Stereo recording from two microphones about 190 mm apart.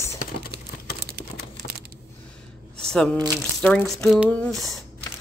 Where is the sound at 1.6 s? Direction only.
45° left (ahead or behind).